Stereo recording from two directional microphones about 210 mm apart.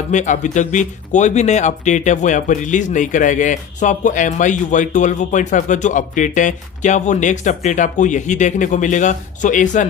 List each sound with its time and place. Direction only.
0.1 s speech: 35° left (ahead or behind)